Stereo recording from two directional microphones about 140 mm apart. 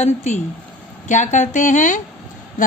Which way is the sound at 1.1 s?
60° left (ahead or behind).